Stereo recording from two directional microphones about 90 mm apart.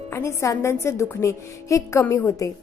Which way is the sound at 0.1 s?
30° left (ahead or behind).